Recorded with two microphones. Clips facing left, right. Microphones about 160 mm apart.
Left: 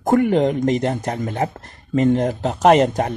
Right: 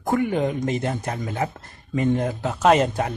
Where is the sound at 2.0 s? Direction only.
60° left (ahead or behind).